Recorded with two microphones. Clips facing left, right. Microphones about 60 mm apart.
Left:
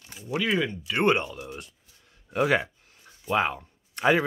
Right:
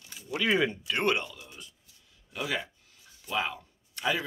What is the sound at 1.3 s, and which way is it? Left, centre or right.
Speech, left.